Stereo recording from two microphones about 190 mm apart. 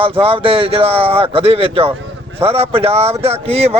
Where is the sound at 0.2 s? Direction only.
30° right (ahead or behind).